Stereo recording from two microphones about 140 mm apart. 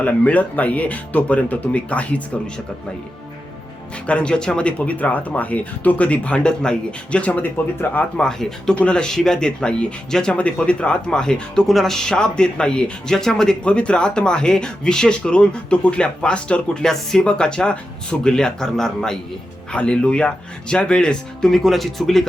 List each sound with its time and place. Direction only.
0.0 s speech: 10° left (ahead or behind)
4.0 s speech: 10° left (ahead or behind)